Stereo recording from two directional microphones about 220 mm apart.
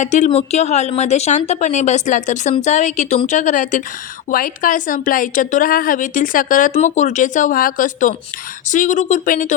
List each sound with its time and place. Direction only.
0.0 s speech: 35° left (ahead or behind)